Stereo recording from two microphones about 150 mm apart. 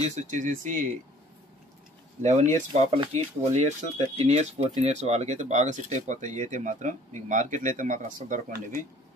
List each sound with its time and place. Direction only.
0.0 s speech: 55° right (ahead or behind)
2.2 s speech: 50° right (ahead or behind)